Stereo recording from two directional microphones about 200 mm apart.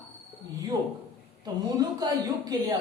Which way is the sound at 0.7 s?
20° right (ahead or behind).